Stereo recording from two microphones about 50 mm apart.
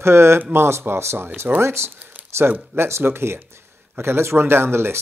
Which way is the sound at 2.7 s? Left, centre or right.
Right.